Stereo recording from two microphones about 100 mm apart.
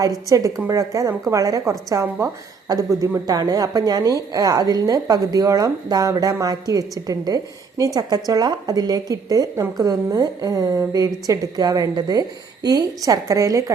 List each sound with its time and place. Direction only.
0.0 s a woman's voice: 35° right (ahead or behind)